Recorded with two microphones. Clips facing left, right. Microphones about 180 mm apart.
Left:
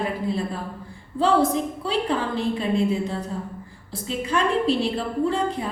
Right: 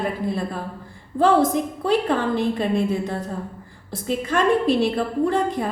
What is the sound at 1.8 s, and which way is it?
A woman's voice, 50° right (ahead or behind).